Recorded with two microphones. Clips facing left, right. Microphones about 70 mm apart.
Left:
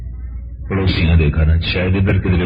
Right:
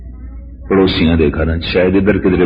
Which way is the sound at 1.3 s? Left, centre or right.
Right.